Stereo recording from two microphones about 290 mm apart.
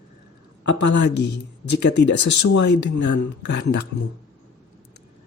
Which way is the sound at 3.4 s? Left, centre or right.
Left.